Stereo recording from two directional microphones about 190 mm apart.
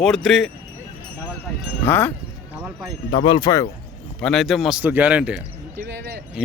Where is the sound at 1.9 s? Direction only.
10° left (ahead or behind).